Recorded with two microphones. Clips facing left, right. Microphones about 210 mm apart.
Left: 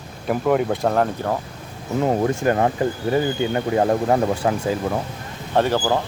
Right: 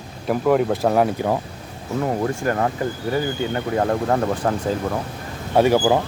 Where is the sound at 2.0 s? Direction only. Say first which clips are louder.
Left 3 dB; 20° left (ahead or behind).